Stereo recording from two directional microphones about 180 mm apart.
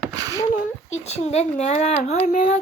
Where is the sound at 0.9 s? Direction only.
40° left (ahead or behind).